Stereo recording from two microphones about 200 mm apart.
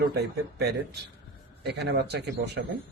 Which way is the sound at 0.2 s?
55° right (ahead or behind).